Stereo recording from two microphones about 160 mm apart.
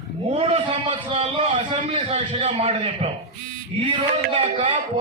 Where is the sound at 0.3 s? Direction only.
35° right (ahead or behind).